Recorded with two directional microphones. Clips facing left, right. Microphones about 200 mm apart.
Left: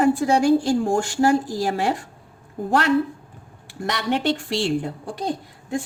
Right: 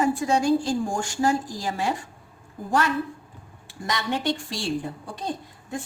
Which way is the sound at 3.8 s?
65° left (ahead or behind).